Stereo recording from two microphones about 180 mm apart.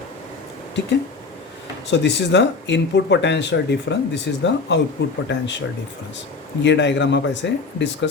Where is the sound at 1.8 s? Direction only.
75° left (ahead or behind).